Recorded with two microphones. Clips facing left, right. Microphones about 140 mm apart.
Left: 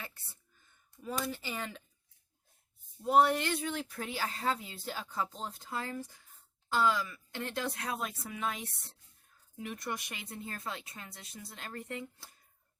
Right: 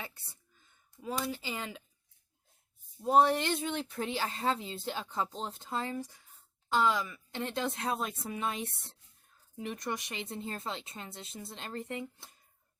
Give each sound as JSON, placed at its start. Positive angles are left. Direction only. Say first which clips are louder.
{"t": 1.0, "sound": "speech", "louder": "right 1 dB", "side_deg": -15}
{"t": 3.1, "sound": "speech", "louder": "right 1 dB", "side_deg": -25}
{"t": 9.6, "sound": "speech", "louder": "right 2 dB", "side_deg": -20}